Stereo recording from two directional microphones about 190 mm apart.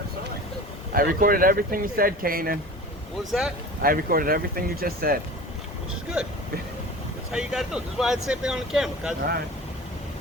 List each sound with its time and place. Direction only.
0.9 s speech: 50° right (ahead or behind)
3.8 s speech: 50° right (ahead or behind)
6.2 s speech: 5° right (ahead or behind)